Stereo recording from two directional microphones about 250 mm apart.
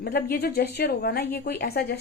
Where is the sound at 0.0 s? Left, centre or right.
Left.